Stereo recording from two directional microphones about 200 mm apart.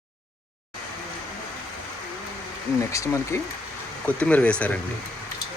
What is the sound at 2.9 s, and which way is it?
Speech, 15° left (ahead or behind).